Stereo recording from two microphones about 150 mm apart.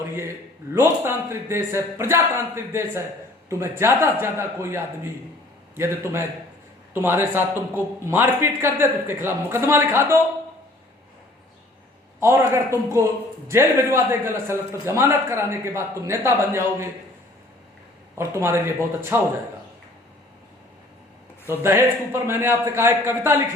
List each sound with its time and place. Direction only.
0.7 s a man's voice: 15° right (ahead or behind)
12.2 s a man's voice: 20° right (ahead or behind)
18.2 s a man's voice: 15° right (ahead or behind)
21.6 s a man's voice: 15° right (ahead or behind)